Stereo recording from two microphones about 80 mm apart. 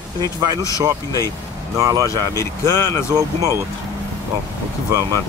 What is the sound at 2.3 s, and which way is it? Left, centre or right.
Speech, left.